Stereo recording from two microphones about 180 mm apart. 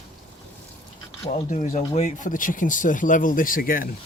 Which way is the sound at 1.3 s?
40° left (ahead or behind).